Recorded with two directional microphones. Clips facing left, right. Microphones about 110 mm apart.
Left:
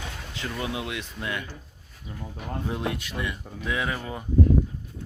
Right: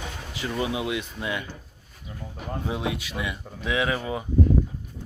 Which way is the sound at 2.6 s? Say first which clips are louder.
Right 1 dB; 10° right (ahead or behind).